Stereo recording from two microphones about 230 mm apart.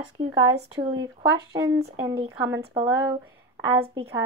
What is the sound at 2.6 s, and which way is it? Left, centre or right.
Speech, right.